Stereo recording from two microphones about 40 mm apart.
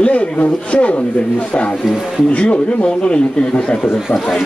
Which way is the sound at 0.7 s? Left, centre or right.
Left.